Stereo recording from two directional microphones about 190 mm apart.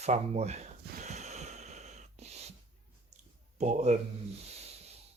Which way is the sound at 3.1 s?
40° right (ahead or behind).